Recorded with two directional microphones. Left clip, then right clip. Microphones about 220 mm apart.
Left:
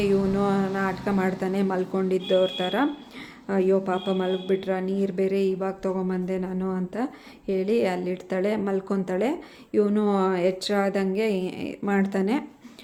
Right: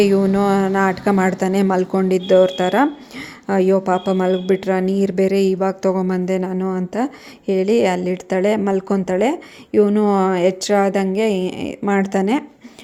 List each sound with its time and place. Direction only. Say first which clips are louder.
0.0 s a woman's voice: right 8 dB; 35° right (ahead or behind)